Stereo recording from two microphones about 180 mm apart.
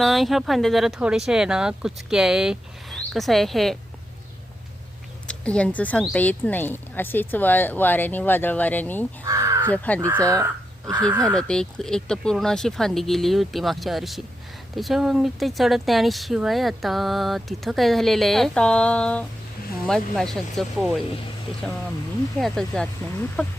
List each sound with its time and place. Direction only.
0.0 s speech: centre (ahead or behind)
5.3 s speech: 5° left (ahead or behind)
9.2 s crow: 20° right (ahead or behind)
9.6 s speech: 10° left (ahead or behind)
10.2 s speech: 20° right (ahead or behind)
11.2 s speech: 5° left (ahead or behind)
22.4 s speech: centre (ahead or behind)